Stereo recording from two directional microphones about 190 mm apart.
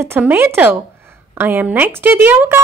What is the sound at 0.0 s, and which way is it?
A woman's voice, 10° right (ahead or behind).